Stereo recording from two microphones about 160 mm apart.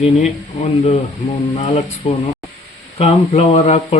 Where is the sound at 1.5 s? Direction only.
35° left (ahead or behind).